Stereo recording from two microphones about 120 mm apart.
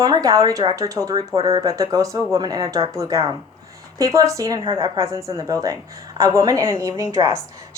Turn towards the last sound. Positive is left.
turn(degrees=-25)  # may be behind; listen again after turning